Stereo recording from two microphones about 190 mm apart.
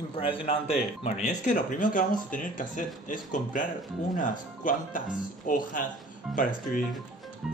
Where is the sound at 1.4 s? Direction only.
45° left (ahead or behind).